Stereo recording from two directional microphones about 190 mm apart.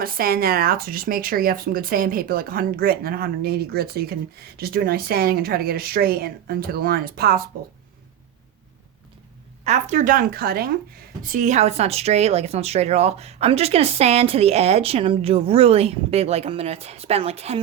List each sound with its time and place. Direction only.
0.0 s speech: 50° right (ahead or behind)
9.6 s speech: 35° right (ahead or behind)